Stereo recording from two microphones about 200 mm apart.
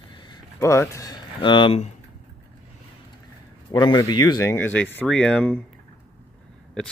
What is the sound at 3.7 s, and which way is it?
Speech, 20° left (ahead or behind).